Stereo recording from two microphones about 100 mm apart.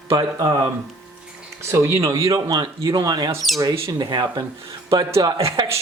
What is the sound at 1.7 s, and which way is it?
Speech, 30° right (ahead or behind).